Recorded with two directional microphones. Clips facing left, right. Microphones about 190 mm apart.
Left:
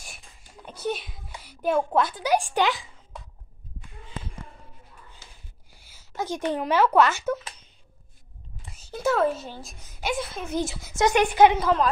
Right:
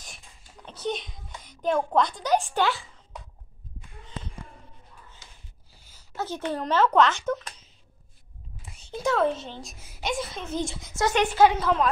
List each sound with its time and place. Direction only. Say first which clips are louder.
0.7 s a sound: left 1 dB; 10° left (ahead or behind)
5.7 s a woman's voice: even; 10° left (ahead or behind)
11.0 s a woman's voice: left 2 dB; 15° left (ahead or behind)